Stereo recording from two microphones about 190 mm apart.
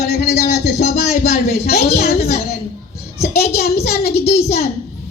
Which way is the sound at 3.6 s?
55° left (ahead or behind).